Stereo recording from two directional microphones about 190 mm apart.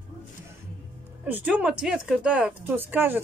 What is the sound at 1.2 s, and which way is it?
Speech, 10° right (ahead or behind).